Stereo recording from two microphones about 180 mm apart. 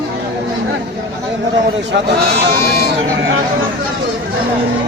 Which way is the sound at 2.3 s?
70° right (ahead or behind).